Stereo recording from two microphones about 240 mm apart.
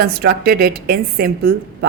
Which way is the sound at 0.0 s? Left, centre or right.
Right.